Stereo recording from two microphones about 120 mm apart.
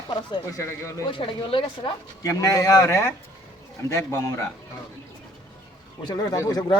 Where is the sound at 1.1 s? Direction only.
45° left (ahead or behind).